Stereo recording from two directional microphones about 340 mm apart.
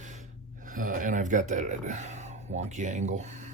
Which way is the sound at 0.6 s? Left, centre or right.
Right.